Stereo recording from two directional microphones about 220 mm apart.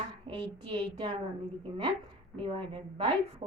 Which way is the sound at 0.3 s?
20° right (ahead or behind).